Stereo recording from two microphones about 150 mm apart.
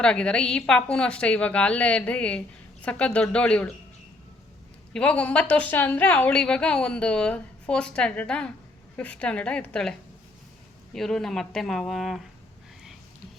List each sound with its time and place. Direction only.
0.0 s a woman's voice: 5° left (ahead or behind)
4.9 s a woman's voice: 10° left (ahead or behind)
10.9 s speech: 5° left (ahead or behind)